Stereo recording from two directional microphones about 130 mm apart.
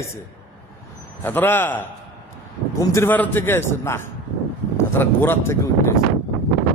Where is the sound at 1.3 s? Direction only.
15° left (ahead or behind).